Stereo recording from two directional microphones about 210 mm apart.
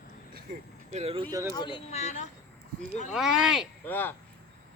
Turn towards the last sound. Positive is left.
turn(degrees=10)  # may be behind; listen again after turning